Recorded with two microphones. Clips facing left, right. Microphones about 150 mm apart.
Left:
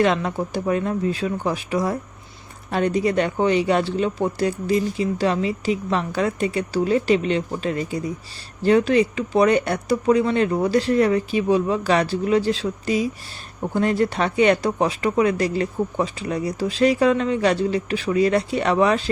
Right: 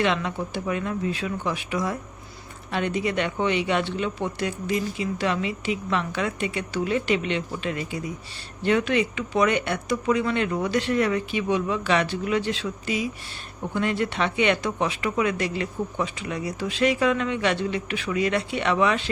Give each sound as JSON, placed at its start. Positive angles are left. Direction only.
{"t": 0.0, "sound": "speech", "side_deg": 40}